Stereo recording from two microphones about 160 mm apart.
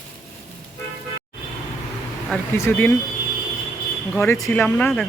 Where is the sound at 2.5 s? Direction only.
15° left (ahead or behind).